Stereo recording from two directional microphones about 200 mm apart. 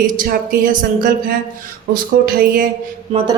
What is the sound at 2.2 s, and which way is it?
Speech, 50° right (ahead or behind).